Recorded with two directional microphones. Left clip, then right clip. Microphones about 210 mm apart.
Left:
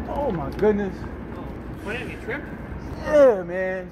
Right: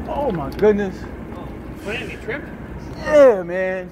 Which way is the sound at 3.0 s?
40° right (ahead or behind).